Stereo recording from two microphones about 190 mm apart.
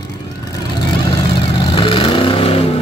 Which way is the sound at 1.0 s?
25° left (ahead or behind).